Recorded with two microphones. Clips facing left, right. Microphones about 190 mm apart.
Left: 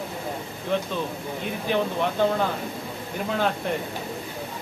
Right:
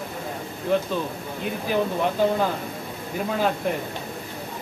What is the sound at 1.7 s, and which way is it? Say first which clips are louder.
Speech: right 1 dB; 5° right (ahead or behind).